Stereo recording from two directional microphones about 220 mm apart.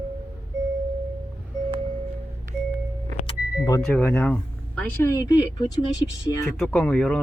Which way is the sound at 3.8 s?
5° left (ahead or behind).